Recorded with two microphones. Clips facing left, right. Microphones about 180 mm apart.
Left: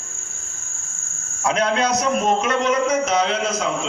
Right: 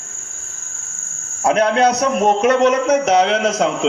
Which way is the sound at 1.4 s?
60° right (ahead or behind).